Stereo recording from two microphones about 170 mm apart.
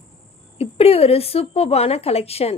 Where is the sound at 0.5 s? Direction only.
35° left (ahead or behind).